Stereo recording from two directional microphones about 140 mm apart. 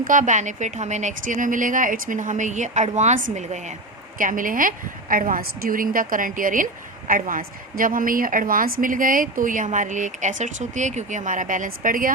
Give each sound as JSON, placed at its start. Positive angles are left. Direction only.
{"t": 0.0, "sound": "a woman's voice", "side_deg": -65}
{"t": 4.2, "sound": "a woman's voice", "side_deg": -70}